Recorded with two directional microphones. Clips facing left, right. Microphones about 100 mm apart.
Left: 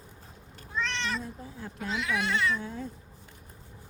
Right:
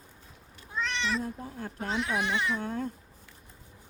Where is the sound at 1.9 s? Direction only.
30° right (ahead or behind).